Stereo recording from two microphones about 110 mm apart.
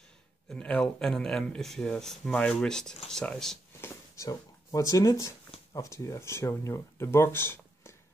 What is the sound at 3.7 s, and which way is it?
Speech, 25° left (ahead or behind).